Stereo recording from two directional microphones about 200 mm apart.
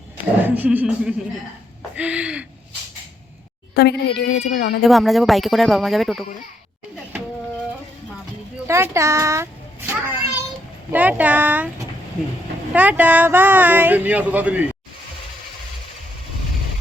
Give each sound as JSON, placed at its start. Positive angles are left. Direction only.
{"t": 0.4, "sound": "speech", "side_deg": -10}
{"t": 3.8, "sound": "speech", "side_deg": 55}
{"t": 4.8, "sound": "speech", "side_deg": 0}
{"t": 8.6, "sound": "a sound", "side_deg": -15}
{"t": 10.9, "sound": "speech", "side_deg": -10}